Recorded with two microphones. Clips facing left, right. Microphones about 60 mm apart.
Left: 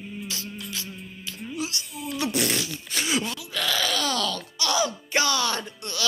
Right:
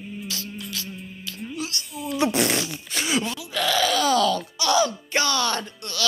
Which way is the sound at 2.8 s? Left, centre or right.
Centre.